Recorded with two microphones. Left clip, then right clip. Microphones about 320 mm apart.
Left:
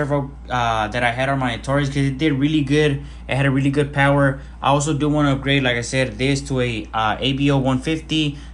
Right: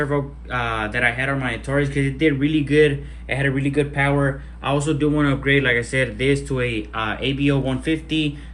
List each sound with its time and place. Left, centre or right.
0.1 s a man's voice: centre